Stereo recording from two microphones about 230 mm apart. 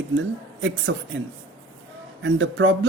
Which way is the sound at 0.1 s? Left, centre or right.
Right.